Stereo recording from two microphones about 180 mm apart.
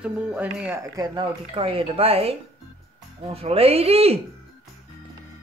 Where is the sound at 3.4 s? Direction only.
35° right (ahead or behind).